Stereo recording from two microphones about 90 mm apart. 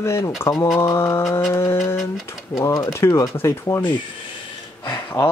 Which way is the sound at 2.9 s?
35° left (ahead or behind).